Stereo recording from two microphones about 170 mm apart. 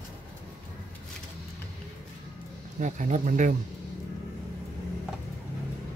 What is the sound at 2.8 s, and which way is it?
Speech, 50° right (ahead or behind).